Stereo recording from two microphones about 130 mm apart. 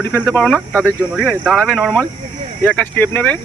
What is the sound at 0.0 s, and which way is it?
Speech, 10° left (ahead or behind).